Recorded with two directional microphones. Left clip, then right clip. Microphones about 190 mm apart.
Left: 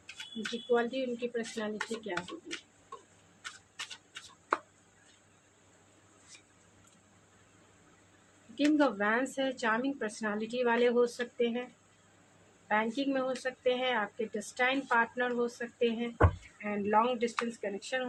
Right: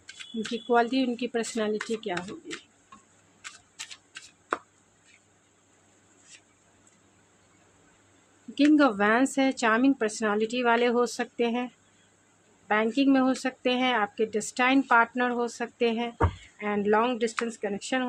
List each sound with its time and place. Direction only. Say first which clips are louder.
0.7 s speech: right 6 dB; 60° right (ahead or behind)
8.5 s speech: right 7 dB; 60° right (ahead or behind)
12.6 s speech: right 7 dB; 60° right (ahead or behind)